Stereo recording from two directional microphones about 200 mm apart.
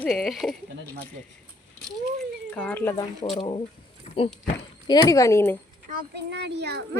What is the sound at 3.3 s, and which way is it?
Speech, 25° left (ahead or behind).